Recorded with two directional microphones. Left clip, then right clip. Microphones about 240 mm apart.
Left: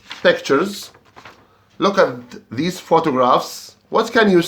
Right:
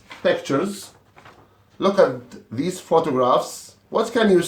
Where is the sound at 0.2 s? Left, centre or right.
Left.